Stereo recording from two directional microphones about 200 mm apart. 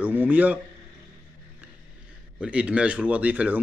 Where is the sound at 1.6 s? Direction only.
5° right (ahead or behind).